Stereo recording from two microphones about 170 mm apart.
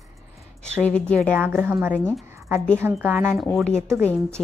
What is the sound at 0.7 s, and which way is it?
Speech, 5° left (ahead or behind).